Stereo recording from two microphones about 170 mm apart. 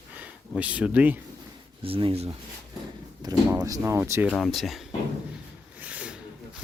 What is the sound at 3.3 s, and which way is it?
Speech, 20° right (ahead or behind).